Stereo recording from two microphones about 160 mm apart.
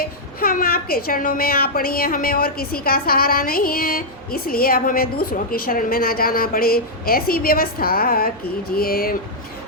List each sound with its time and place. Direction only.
0.0 s a woman's voice: 65° left (ahead or behind)